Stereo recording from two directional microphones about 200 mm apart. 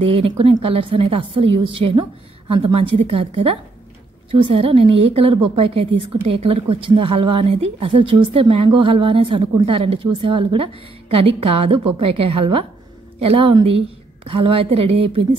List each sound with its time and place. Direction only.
0.0 s a woman's voice: 30° right (ahead or behind)